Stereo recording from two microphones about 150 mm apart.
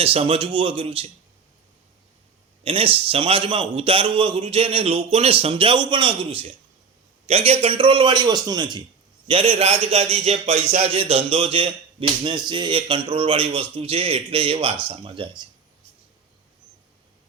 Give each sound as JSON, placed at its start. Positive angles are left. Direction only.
{"t": 0.0, "sound": "a man's voice", "side_deg": -40}
{"t": 2.6, "sound": "a man's voice", "side_deg": -35}